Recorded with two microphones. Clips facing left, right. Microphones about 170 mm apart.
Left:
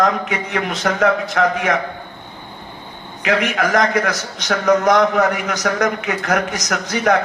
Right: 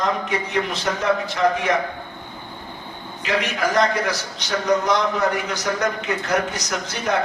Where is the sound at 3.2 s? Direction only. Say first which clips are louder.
Left 5 dB; 80° left.